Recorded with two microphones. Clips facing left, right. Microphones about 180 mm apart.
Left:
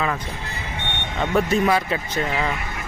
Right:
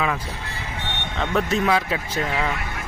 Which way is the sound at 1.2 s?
5° left (ahead or behind).